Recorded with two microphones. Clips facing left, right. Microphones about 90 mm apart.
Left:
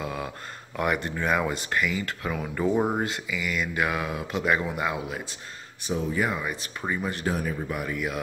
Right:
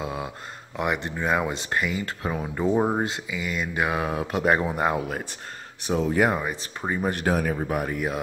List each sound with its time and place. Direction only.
0.0 s a sound: 25° right (ahead or behind)
0.7 s speech: 20° right (ahead or behind)
4.2 s speech: 45° right (ahead or behind)
4.6 s speech: 35° right (ahead or behind)
5.9 s speech: 65° right (ahead or behind)
6.4 s speech: 25° right (ahead or behind)
7.1 s speech: 60° right (ahead or behind)
7.6 s speech: 45° right (ahead or behind)